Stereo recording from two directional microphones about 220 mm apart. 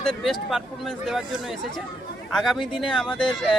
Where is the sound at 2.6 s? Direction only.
20° left (ahead or behind).